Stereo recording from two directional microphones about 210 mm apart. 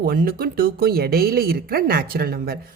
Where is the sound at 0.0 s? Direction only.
45° right (ahead or behind).